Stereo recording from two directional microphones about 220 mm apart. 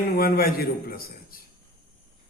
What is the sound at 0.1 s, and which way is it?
A man's voice, 40° left (ahead or behind).